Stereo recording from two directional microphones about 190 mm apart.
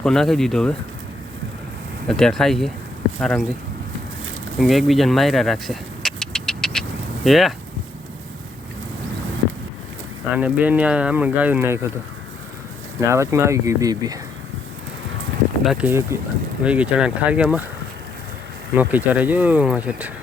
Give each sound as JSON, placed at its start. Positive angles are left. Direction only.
{"t": 0.0, "sound": "speech", "side_deg": 5}
{"t": 2.0, "sound": "speech", "side_deg": 5}
{"t": 4.6, "sound": "vehicle", "side_deg": 0}
{"t": 7.3, "sound": "speech", "side_deg": 0}
{"t": 10.3, "sound": "speech", "side_deg": -5}
{"t": 13.1, "sound": "speech", "side_deg": -15}
{"t": 15.6, "sound": "speech", "side_deg": -5}
{"t": 18.7, "sound": "speech", "side_deg": -10}